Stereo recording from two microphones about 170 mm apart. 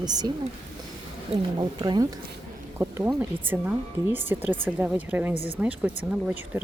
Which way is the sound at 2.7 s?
15° right (ahead or behind).